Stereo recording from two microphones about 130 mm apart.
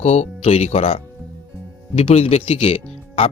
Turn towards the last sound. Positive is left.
turn(degrees=50)  # may be behind; listen again after turning